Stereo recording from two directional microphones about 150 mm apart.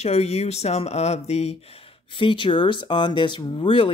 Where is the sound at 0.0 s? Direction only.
45° left (ahead or behind).